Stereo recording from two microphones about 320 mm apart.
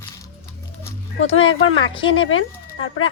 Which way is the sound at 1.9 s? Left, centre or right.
Centre.